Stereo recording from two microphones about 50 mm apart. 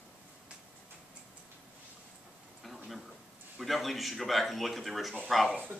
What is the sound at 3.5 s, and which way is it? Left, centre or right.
Speech, centre.